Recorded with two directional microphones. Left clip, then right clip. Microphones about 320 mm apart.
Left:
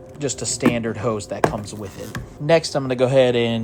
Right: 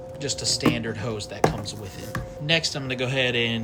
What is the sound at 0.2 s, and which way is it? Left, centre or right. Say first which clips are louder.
Speech: left 3 dB; centre.